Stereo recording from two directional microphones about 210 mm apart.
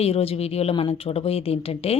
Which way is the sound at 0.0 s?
30° left (ahead or behind).